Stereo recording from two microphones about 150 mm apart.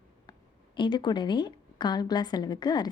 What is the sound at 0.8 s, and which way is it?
A woman's voice, 30° left (ahead or behind).